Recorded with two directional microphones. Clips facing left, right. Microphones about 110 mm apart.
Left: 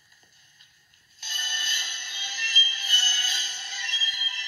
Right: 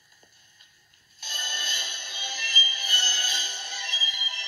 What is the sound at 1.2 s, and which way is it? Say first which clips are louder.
Music: even; 25° right (ahead or behind).